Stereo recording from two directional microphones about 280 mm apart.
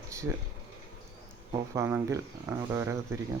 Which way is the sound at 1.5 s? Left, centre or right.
Centre.